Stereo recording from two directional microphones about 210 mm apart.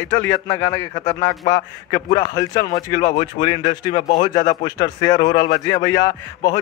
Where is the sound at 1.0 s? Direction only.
30° left (ahead or behind).